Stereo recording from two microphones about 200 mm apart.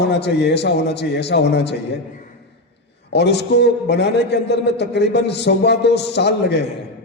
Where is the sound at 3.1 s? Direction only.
60° left (ahead or behind).